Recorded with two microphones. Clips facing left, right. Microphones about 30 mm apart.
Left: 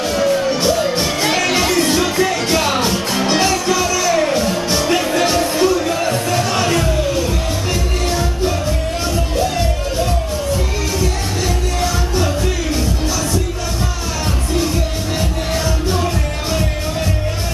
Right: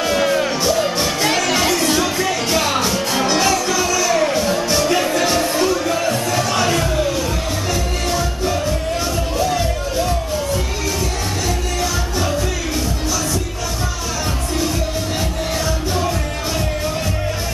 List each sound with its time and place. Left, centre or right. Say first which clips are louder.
0.1 s music: left 1 dB; right
0.5 s music: left 2 dB; centre
5.3 s music: left 2 dB; centre